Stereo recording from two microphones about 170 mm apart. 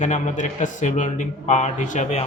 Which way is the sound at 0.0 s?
45° left (ahead or behind).